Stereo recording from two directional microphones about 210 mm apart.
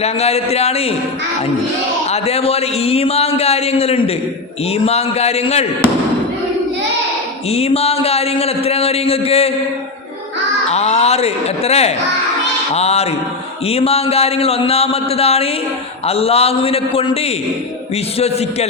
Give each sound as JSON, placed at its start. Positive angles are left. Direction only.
{"t": 0.0, "sound": "a man's voice", "side_deg": 30}
{"t": 2.0, "sound": "a man's voice", "side_deg": 30}
{"t": 7.5, "sound": "a man's voice", "side_deg": 30}
{"t": 10.7, "sound": "a man's voice", "side_deg": 30}